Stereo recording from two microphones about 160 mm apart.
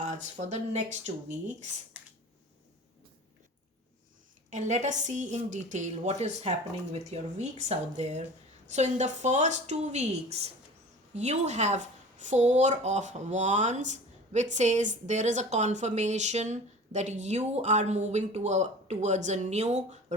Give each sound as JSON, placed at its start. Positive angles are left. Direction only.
{"t": 0.0, "sound": "speech", "side_deg": -50}
{"t": 4.4, "sound": "speech", "side_deg": -50}